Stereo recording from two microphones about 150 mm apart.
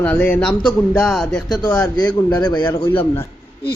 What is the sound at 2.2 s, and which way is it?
Speech, 30° left (ahead or behind).